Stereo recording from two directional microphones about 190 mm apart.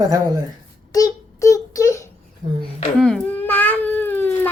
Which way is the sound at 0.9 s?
15° left (ahead or behind).